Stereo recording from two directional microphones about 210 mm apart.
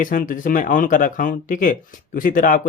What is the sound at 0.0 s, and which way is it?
Speech, 40° left (ahead or behind).